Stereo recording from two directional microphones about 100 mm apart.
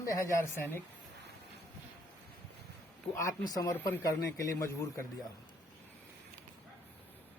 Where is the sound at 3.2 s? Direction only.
35° left (ahead or behind).